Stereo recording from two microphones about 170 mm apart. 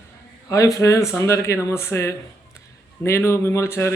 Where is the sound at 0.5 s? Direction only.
20° left (ahead or behind).